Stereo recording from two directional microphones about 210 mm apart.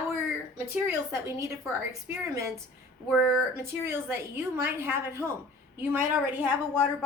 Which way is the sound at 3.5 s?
10° right (ahead or behind).